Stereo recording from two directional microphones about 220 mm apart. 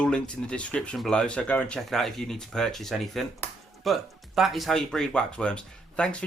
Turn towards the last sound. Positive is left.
turn(degrees=5)  # may be behind; listen again after turning